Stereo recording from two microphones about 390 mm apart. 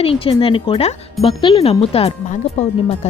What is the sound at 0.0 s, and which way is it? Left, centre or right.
Speech, centre.